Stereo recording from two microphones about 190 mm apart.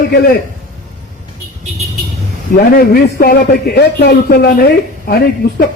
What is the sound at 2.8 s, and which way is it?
Speech, 55° left (ahead or behind).